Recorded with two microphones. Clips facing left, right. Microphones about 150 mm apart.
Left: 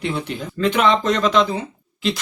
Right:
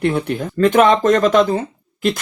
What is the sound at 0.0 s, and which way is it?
Speech, 55° right (ahead or behind).